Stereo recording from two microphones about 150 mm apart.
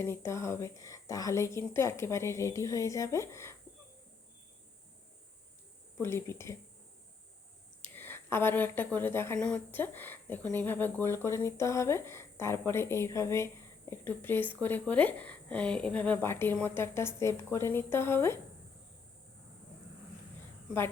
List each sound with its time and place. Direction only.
0.0 s a woman's voice: 15° left (ahead or behind)
6.0 s speech: 15° left (ahead or behind)
7.8 s speech: 15° left (ahead or behind)